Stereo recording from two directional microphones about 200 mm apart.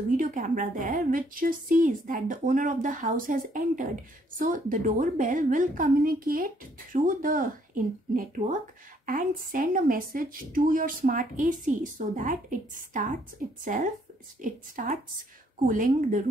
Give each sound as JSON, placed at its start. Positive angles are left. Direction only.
{"t": 0.2, "sound": "a woman's voice", "side_deg": -40}